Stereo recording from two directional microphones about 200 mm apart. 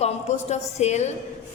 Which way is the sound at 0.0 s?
35° left (ahead or behind).